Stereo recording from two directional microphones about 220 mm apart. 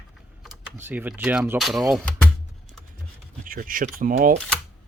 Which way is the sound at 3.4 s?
40° right (ahead or behind).